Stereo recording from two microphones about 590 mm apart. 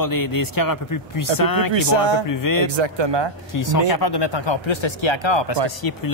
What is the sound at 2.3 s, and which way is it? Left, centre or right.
Speech, left.